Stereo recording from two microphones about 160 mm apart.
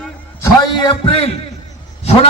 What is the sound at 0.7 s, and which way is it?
Speech, 30° left (ahead or behind).